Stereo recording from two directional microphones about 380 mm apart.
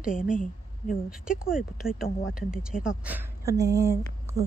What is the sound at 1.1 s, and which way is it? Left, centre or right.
A woman's voice, centre.